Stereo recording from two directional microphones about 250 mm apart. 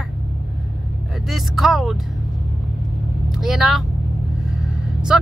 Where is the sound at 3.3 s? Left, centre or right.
Centre.